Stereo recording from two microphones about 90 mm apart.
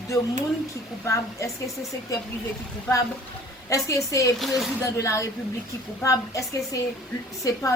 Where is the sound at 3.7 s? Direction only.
40° left (ahead or behind).